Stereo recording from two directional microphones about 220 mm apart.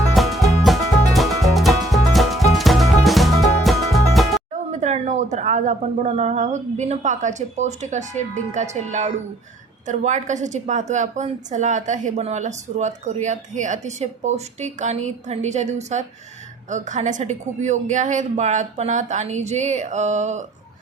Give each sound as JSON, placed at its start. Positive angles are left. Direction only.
{"t": 0.2, "sound": "music", "side_deg": 0}
{"t": 4.5, "sound": "a woman's voice", "side_deg": -35}